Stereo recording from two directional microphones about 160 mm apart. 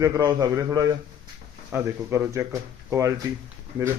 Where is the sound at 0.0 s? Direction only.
20° right (ahead or behind).